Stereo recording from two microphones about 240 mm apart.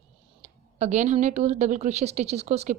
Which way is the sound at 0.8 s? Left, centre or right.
Right.